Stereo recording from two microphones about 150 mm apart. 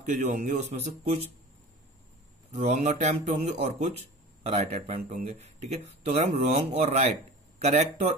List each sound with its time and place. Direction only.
0.0 s speech: 50° right (ahead or behind)
2.5 s speech: 50° right (ahead or behind)